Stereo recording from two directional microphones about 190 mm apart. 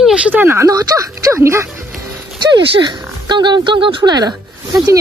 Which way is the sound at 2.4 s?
25° right (ahead or behind).